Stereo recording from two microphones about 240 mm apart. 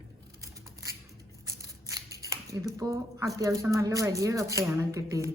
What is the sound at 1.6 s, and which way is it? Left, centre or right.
Scissors, centre.